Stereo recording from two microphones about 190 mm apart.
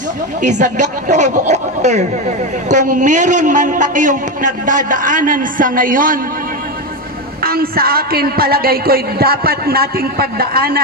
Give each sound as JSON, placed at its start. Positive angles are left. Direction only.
{"t": 0.4, "sound": "a woman's voice", "side_deg": -40}
{"t": 7.4, "sound": "a man's voice", "side_deg": -50}